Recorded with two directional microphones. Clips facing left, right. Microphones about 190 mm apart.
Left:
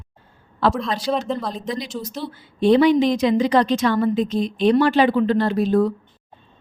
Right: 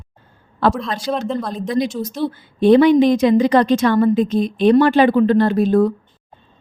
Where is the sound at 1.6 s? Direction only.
50° right (ahead or behind).